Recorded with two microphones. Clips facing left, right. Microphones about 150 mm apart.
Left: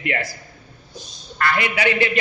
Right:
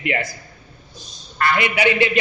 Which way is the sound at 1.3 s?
20° right (ahead or behind).